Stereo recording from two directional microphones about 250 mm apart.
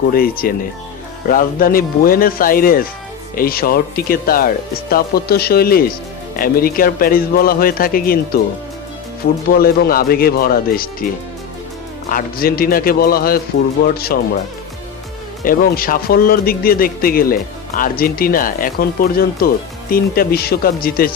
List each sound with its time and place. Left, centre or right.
0.1 s speech: left
9.6 s speech: left
12.0 s speech: left
15.4 s speech: left